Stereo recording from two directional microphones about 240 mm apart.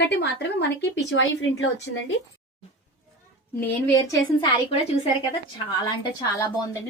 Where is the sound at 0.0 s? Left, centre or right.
Left.